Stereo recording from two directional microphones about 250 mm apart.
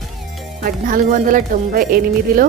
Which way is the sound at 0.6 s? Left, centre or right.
Right.